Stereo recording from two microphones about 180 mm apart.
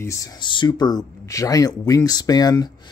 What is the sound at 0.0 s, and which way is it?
Speech, 20° left (ahead or behind).